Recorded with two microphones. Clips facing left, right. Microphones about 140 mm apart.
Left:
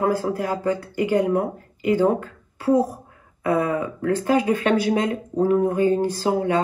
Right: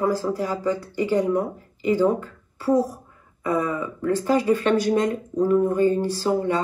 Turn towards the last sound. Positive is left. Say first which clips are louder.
# left 1 dB
turn(degrees=50)  # may be behind; listen again after turning